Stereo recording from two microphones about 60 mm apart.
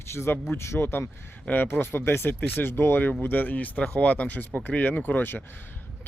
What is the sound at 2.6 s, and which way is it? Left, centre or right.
Speech, left.